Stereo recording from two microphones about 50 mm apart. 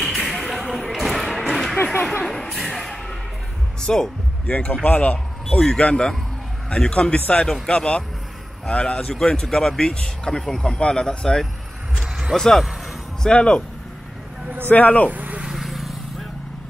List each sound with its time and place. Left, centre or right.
0.2 s a sound: centre
2.2 s music: centre
3.8 s speech: centre
4.5 s a man's voice: left; by 12.6 s centre
13.2 s a man's voice: left
14.7 s a man's voice: left
15.0 s vehicle: right
15.5 s vehicle: centre